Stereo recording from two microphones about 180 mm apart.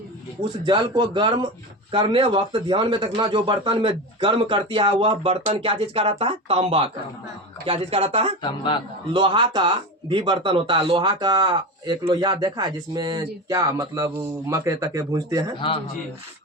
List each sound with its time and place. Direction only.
0.6 s speech: 25° right (ahead or behind)
15.5 s a man's voice: 30° left (ahead or behind)